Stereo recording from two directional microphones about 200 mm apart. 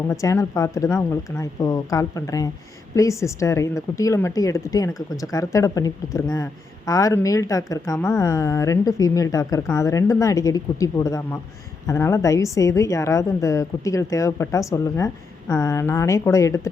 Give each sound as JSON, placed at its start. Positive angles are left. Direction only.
{"t": 0.1, "sound": "a woman's voice", "side_deg": 15}